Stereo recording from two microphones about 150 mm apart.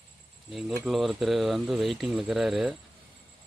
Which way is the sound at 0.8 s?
Centre (ahead or behind).